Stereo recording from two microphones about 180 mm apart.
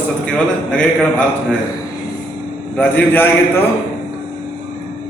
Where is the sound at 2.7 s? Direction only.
10° left (ahead or behind).